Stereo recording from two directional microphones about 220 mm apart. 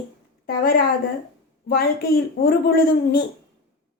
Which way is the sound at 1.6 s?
45° left (ahead or behind).